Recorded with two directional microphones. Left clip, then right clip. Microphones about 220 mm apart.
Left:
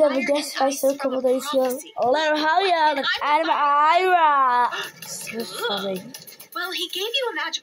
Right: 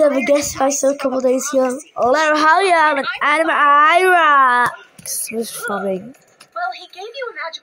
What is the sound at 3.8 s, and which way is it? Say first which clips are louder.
Speech: right 6 dB; 55° right (ahead or behind).